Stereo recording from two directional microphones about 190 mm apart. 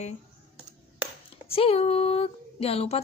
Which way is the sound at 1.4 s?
30° left (ahead or behind).